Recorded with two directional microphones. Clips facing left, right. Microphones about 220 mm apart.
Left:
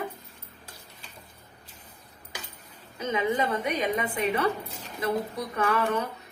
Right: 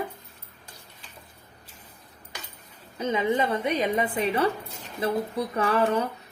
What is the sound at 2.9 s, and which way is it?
A woman's voice, 30° right (ahead or behind).